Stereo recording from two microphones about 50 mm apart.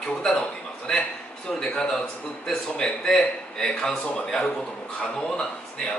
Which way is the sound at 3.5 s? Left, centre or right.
Centre.